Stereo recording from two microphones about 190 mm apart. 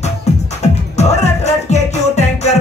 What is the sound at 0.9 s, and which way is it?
Music, 35° left (ahead or behind).